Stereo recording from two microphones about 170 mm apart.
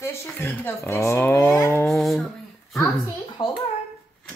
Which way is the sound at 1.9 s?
Centre (ahead or behind).